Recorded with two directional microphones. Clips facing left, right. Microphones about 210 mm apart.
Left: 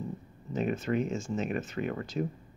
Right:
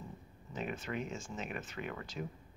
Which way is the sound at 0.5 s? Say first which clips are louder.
Left 10 dB; 40° left (ahead or behind).